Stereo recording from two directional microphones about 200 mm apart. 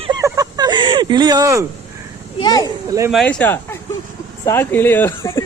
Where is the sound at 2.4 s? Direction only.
20° left (ahead or behind).